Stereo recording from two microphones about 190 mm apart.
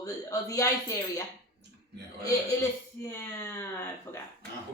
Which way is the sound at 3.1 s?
15° left (ahead or behind).